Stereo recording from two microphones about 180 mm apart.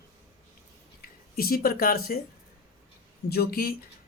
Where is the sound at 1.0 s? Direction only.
55° left (ahead or behind).